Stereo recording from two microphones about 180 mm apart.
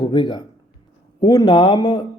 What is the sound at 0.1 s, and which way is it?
Speech, 25° left (ahead or behind).